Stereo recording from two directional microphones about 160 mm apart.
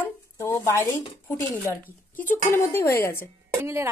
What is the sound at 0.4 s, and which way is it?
Speech, 15° left (ahead or behind).